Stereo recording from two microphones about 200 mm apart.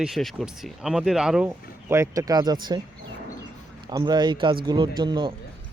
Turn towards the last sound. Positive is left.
turn(degrees=-20)  # may be behind; listen again after turning